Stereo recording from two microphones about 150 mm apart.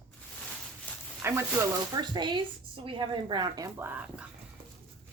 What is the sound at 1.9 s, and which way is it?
A woman's voice, 30° right (ahead or behind).